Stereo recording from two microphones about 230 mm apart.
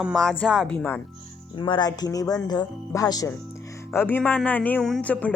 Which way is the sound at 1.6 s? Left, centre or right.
Centre.